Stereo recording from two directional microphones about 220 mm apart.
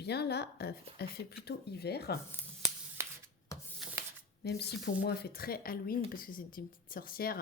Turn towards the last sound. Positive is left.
turn(degrees=45)  # may be behind; listen again after turning